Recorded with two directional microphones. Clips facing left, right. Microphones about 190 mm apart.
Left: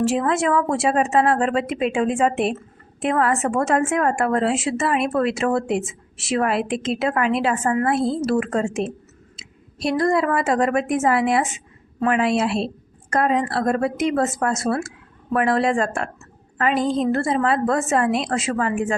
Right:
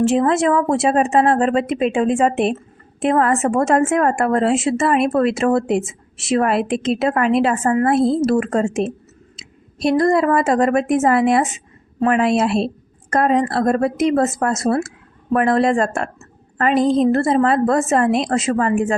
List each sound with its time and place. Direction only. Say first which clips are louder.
0.2 s speech: right 4 dB; 35° right (ahead or behind)
9.3 s a sound: right 2 dB; 45° right (ahead or behind)
9.9 s speech: right 4 dB; 40° right (ahead or behind)